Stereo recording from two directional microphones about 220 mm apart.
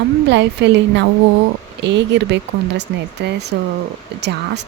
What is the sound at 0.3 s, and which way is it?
Speech, 55° right (ahead or behind).